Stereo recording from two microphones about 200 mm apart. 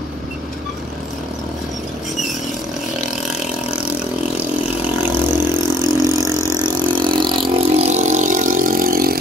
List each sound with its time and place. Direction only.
5.3 s vehicle: 10° right (ahead or behind)
6.6 s vehicle: 25° right (ahead or behind); by 9.1 s 45° right (ahead or behind)